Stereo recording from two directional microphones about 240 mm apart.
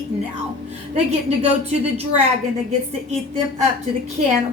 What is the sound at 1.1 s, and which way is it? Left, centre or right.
Speech, right.